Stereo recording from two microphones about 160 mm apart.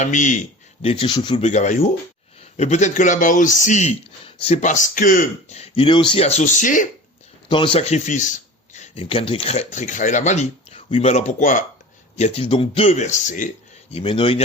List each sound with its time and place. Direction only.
0.0 s speech: 50° left (ahead or behind)
0.8 s speech: 35° left (ahead or behind)
1.4 s speech: 45° left (ahead or behind)
7.4 s speech: 30° left (ahead or behind); by 11.6 s 50° left (ahead or behind)
12.1 s speech: 40° left (ahead or behind)
13.9 s speech: 35° left (ahead or behind)